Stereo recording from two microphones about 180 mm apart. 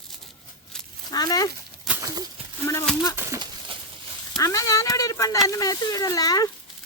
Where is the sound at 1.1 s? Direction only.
20° left (ahead or behind).